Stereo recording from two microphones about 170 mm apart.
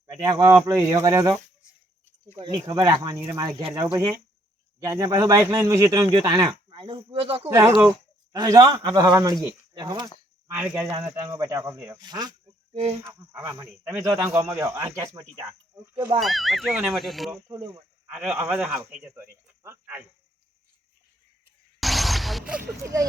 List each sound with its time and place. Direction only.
0.1 s speech: 20° right (ahead or behind)
2.4 s speech: 25° right (ahead or behind)
6.7 s speech: 30° right (ahead or behind)
7.8 s speech: 20° right (ahead or behind)
12.7 s speech: 35° right (ahead or behind)
13.1 s speech: 15° right (ahead or behind)
16.2 s speech: centre (ahead or behind)
17.5 s speech: 20° right (ahead or behind)
21.8 s a sound: centre (ahead or behind); by 23.0 s 15° right (ahead or behind)